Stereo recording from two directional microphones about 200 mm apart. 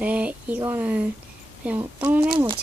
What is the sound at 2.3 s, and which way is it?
Speech, 25° right (ahead or behind).